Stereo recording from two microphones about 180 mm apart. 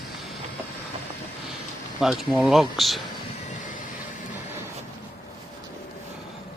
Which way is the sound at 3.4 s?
45° left (ahead or behind).